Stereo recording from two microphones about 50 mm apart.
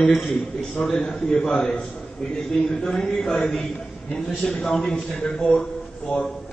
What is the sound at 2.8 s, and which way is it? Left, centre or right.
A man's voice, centre.